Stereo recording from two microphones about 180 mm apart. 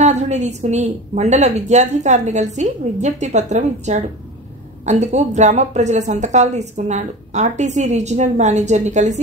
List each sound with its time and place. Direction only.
0.0 s a woman's voice: 40° right (ahead or behind)